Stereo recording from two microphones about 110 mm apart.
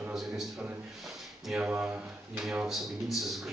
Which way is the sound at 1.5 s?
10° right (ahead or behind).